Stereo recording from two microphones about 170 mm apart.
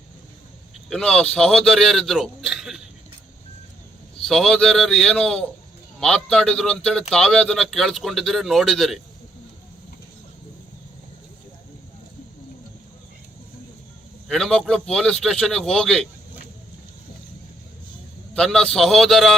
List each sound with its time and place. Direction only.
0.9 s a man's voice: 5° left (ahead or behind)
4.2 s a man's voice: centre (ahead or behind)
14.3 s a man's voice: 5° left (ahead or behind)
18.3 s a man's voice: 5° left (ahead or behind)